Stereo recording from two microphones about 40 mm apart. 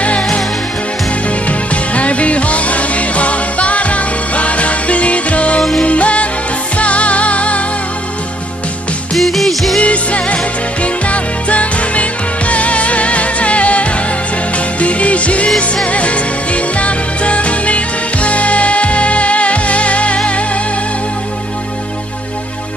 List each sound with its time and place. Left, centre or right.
0.0 s music: left
1.5 s music: left
9.1 s music: centre
9.8 s music: left